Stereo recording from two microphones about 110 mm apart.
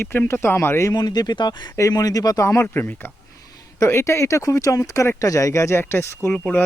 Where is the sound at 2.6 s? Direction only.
15° left (ahead or behind).